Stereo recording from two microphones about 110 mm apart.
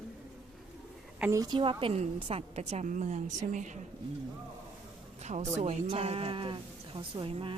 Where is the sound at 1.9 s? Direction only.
85° right.